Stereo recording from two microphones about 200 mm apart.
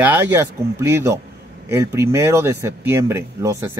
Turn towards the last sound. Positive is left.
turn(degrees=-15)  # may be behind; listen again after turning